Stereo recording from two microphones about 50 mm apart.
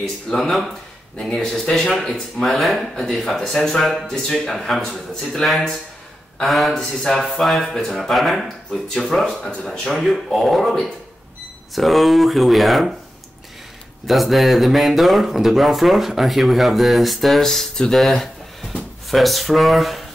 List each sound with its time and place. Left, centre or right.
0.3 s speech: centre
8.0 s speech: centre
14.0 s speech: centre